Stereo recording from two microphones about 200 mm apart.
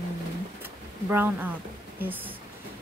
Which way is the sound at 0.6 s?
10° right (ahead or behind).